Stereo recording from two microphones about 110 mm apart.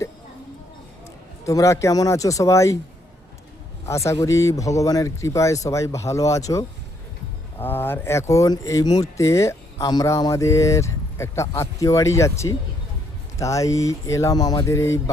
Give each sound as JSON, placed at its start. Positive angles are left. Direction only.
{"t": 1.5, "sound": "speech", "side_deg": 30}
{"t": 3.8, "sound": "speech", "side_deg": 25}